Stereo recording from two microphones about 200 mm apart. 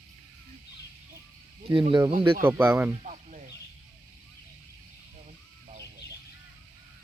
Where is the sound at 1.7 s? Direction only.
25° right (ahead or behind).